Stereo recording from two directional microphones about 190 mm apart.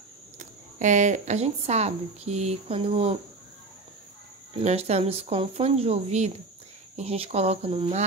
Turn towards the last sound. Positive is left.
turn(degrees=-30)  # may be behind; listen again after turning